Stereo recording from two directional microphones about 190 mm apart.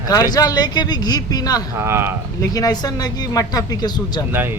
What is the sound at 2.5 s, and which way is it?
Speech, 20° left (ahead or behind).